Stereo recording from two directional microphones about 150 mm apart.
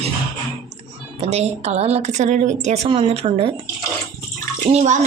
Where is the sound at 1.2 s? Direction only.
45° right (ahead or behind).